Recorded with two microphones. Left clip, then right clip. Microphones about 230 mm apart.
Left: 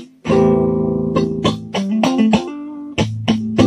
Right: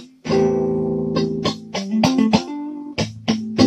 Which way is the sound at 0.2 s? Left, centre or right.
Left.